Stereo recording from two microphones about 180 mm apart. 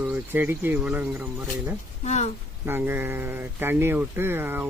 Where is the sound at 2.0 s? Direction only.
40° left (ahead or behind).